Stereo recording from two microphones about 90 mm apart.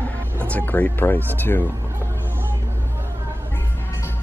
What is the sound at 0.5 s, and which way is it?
Speech, 20° left (ahead or behind).